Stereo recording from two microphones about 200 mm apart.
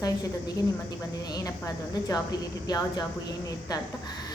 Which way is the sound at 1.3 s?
20° left (ahead or behind).